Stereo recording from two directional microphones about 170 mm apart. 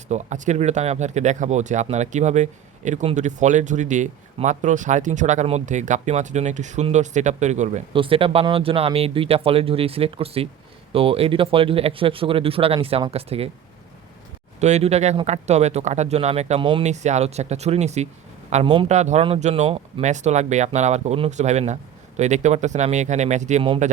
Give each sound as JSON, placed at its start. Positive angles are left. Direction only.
{"t": 0.1, "sound": "speech", "side_deg": -45}
{"t": 14.6, "sound": "speech", "side_deg": -40}
{"t": 18.6, "sound": "speech", "side_deg": -30}
{"t": 18.9, "sound": "speech", "side_deg": -40}